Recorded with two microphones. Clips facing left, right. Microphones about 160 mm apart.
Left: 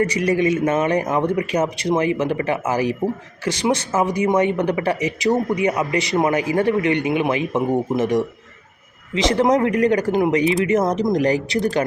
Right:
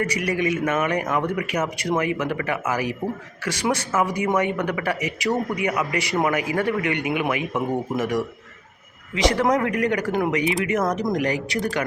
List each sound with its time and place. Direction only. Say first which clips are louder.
0.0 s speech: left 5 dB; 30° left (ahead or behind)